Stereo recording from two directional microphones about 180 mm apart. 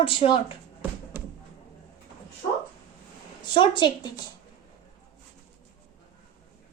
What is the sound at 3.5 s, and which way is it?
Speech, 25° left (ahead or behind).